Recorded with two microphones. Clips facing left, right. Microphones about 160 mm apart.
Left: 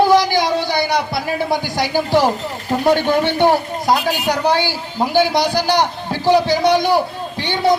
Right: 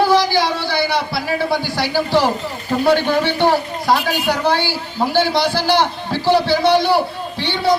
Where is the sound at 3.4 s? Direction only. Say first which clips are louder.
Left 1 dB; 20° left (ahead or behind).